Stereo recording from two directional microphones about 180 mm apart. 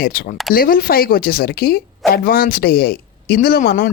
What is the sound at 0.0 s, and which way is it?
Speech, 50° left (ahead or behind).